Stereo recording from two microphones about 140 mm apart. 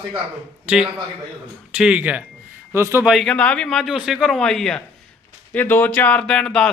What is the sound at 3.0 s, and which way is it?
Speech, centre (ahead or behind).